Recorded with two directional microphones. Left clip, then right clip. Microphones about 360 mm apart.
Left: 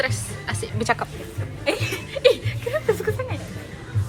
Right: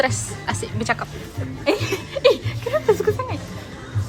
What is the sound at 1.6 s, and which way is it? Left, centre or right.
Chuckle, right.